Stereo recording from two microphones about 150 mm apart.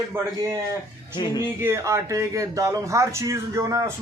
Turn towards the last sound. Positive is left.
turn(degrees=-20)  # may be behind; listen again after turning